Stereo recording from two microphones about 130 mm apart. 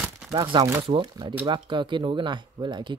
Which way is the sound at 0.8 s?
40° right (ahead or behind).